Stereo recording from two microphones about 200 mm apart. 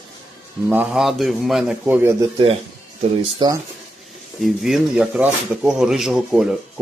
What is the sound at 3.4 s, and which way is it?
Speech, 20° right (ahead or behind).